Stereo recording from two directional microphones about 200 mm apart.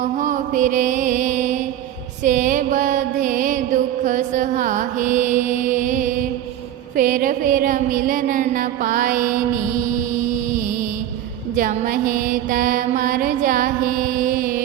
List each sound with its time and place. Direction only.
0.0 s mantra: 40° right (ahead or behind)
11.5 s mantra: 45° right (ahead or behind)